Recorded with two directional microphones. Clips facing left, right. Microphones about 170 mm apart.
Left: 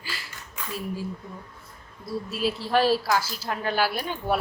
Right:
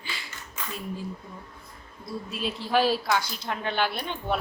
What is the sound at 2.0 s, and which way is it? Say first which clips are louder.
Speech: left 5 dB; 5° left (ahead or behind).